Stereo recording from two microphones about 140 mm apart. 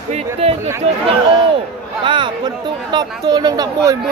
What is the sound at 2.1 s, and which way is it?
Speech, 35° right (ahead or behind).